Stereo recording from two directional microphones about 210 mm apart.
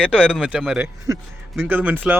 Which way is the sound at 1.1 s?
15° right (ahead or behind).